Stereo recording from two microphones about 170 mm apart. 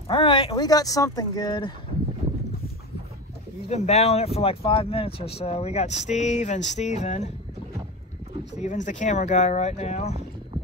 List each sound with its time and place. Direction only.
0.1 s speech: 30° left (ahead or behind)
3.6 s speech: 40° left (ahead or behind)
8.5 s speech: 45° left (ahead or behind)